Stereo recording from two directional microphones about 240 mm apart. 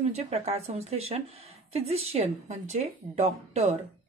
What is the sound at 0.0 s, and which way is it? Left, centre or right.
Speech, right.